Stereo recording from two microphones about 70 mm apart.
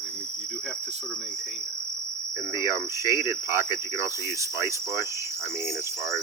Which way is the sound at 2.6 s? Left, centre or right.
Right.